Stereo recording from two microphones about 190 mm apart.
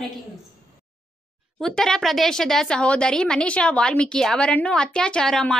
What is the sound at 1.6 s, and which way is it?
A woman's voice, centre (ahead or behind).